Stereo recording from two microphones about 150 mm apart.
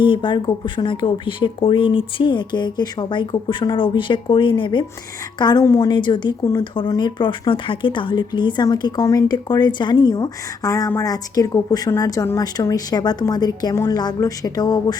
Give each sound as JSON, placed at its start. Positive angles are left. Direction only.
{"t": 0.0, "sound": "speech", "side_deg": 35}